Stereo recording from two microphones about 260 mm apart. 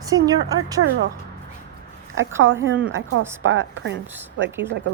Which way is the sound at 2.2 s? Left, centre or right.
Right.